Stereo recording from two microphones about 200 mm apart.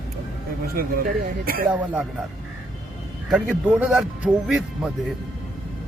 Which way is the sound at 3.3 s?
5° right (ahead or behind).